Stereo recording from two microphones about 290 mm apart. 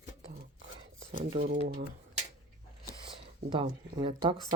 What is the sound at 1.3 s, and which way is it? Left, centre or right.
Speech, right.